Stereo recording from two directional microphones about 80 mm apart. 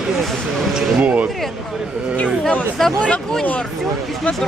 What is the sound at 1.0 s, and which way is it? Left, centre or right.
Speech, centre.